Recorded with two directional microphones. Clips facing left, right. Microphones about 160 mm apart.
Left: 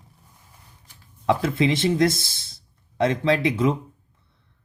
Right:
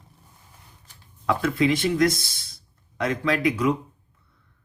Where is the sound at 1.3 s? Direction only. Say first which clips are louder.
Left 1 dB; 25° left (ahead or behind).